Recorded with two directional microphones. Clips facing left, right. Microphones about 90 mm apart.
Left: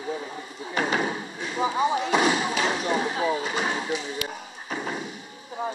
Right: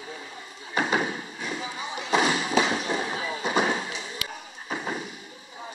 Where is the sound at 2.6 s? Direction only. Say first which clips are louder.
Right 2 dB; 30° right (ahead or behind).